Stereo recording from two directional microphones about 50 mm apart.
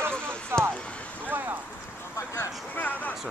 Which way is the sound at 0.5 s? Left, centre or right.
Right.